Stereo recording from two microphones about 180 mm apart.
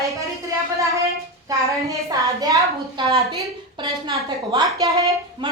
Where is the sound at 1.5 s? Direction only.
20° right (ahead or behind).